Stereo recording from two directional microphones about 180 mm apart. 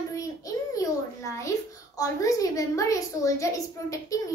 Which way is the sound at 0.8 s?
15° left (ahead or behind).